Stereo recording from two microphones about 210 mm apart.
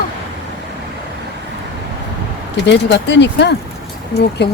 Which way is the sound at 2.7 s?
60° left (ahead or behind).